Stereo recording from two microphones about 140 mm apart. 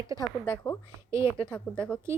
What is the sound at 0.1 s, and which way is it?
Speech, 20° right (ahead or behind).